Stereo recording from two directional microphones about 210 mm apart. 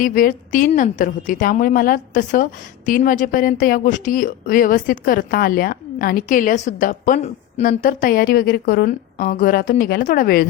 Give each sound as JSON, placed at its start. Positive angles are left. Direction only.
{"t": 0.0, "sound": "a woman's voice", "side_deg": 40}